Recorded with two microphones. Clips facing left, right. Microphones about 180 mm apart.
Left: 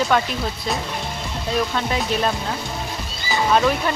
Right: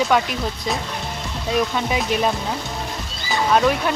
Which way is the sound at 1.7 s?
10° right (ahead or behind).